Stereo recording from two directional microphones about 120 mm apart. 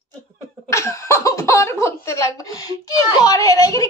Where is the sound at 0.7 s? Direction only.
25° left (ahead or behind).